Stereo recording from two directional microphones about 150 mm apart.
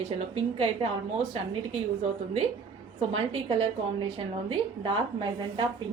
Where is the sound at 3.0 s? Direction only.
40° right (ahead or behind).